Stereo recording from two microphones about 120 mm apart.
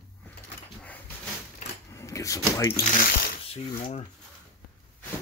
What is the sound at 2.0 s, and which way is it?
Speech, 25° left (ahead or behind).